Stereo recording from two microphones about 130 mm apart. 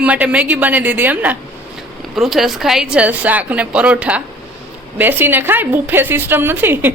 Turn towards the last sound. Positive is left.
turn(degrees=-15)  # may be behind; listen again after turning